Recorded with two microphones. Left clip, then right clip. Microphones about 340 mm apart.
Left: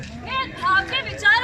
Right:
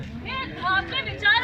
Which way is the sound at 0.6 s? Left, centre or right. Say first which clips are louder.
Left 4 dB; centre.